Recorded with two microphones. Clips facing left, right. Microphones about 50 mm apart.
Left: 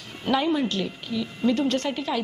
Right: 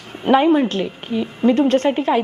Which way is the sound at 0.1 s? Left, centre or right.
Right.